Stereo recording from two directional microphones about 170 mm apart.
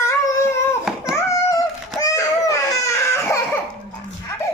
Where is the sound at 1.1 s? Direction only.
20° left (ahead or behind).